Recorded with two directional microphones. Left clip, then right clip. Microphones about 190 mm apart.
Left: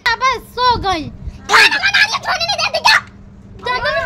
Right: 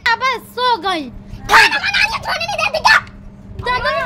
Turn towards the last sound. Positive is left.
turn(degrees=0)  # may be behind; listen again after turning